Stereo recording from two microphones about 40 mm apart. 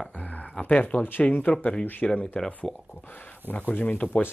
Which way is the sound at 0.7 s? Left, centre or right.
Left.